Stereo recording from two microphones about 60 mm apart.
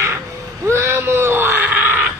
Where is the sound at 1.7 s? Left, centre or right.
Right.